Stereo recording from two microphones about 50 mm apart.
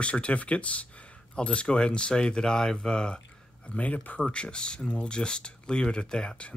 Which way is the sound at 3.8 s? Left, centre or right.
Left.